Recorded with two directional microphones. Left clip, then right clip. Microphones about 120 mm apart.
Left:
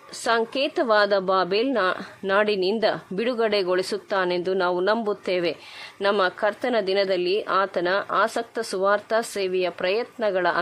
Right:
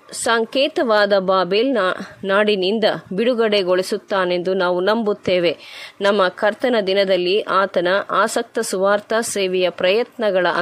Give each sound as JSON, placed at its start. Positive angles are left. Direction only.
{"t": 0.2, "sound": "a woman's voice", "side_deg": -25}